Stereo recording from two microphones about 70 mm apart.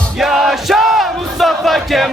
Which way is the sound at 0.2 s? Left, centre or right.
Centre.